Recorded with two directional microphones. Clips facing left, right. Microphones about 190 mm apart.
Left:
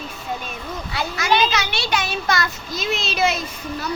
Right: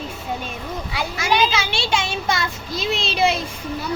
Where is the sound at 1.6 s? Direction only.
25° right (ahead or behind).